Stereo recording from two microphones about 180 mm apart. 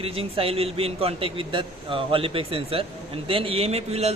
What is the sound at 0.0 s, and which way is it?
A man's voice, 30° right (ahead or behind).